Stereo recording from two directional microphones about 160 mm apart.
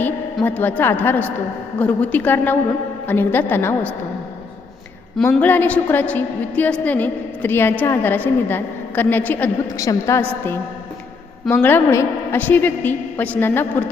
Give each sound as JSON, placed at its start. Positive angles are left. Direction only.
{"t": 0.4, "sound": "a woman's voice", "side_deg": 10}
{"t": 5.3, "sound": "a woman's voice", "side_deg": 10}